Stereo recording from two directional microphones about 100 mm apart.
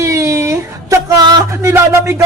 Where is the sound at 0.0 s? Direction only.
30° right (ahead or behind).